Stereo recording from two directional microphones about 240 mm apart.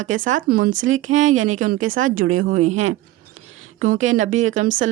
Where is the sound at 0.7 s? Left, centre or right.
Right.